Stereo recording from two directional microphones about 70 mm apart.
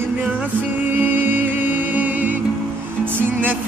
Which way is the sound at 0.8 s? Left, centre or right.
Right.